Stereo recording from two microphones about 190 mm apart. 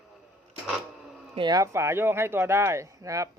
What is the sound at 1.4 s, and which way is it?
Speech, 20° right (ahead or behind).